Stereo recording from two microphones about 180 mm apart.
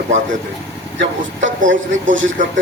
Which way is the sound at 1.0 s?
90° right.